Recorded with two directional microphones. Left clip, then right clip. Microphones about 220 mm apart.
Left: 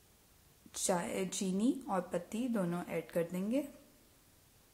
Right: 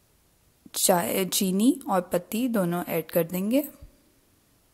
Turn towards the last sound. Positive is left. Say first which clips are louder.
# right 11 dB
turn(degrees=-40)  # may be behind; listen again after turning